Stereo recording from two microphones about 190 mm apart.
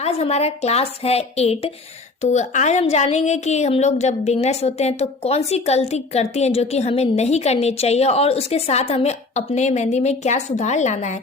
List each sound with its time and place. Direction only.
0.0 s a woman's voice: 35° left (ahead or behind)